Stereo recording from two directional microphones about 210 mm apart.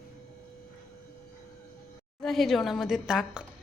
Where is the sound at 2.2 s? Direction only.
Centre (ahead or behind).